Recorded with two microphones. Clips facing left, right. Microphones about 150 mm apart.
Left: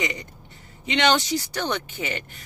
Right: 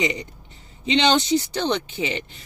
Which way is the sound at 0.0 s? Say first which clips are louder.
Right 5 dB; 20° right (ahead or behind).